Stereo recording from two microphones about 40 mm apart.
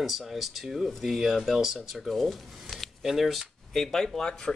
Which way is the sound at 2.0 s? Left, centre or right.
Centre.